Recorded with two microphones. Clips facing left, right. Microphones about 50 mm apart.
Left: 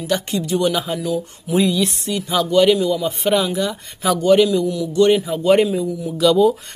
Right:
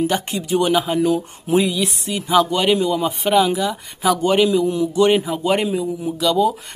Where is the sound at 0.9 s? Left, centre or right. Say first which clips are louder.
Right 4 dB; right.